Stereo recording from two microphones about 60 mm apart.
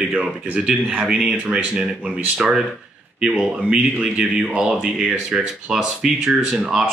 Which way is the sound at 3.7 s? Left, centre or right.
Centre.